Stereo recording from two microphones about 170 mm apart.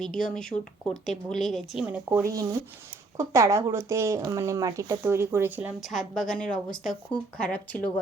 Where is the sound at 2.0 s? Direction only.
15° right (ahead or behind).